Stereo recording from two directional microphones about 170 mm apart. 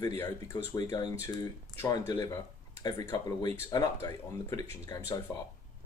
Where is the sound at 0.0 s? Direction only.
25° left (ahead or behind).